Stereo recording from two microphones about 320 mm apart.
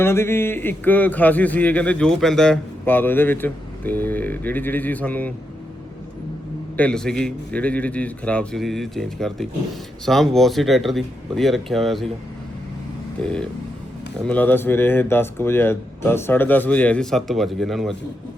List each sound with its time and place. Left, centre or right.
0.0 s a man's voice: centre
6.7 s a man's voice: centre
13.2 s a man's voice: centre